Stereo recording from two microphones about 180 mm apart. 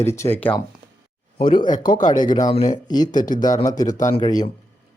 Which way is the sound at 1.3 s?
25° left (ahead or behind).